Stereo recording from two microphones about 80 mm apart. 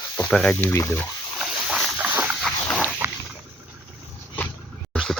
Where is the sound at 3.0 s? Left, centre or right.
Right.